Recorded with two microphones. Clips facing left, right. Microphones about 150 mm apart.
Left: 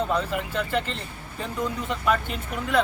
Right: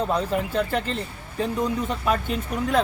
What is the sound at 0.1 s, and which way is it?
Speech, 35° right (ahead or behind).